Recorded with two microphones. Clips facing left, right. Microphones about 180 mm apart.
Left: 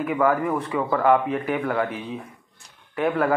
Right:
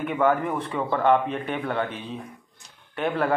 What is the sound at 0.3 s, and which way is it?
Speech, 25° right (ahead or behind).